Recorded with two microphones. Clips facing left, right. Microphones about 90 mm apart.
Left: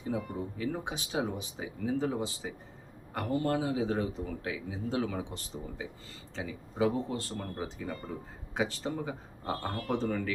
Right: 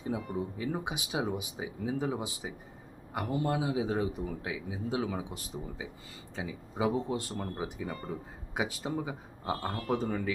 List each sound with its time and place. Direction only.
0.1 s a man's voice: 15° right (ahead or behind)